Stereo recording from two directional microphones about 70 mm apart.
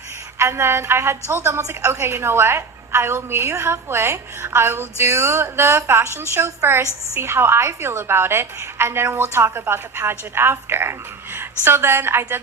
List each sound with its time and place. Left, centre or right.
0.3 s a woman's voice: right